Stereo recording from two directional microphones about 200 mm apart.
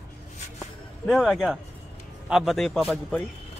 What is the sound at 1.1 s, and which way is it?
A man's voice, centre (ahead or behind).